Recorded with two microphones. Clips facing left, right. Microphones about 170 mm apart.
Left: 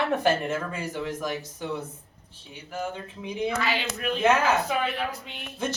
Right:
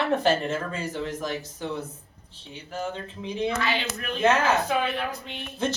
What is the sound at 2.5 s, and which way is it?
Speech, 10° left (ahead or behind).